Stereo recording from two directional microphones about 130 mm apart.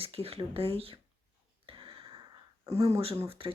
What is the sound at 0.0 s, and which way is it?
Speech, 50° right (ahead or behind).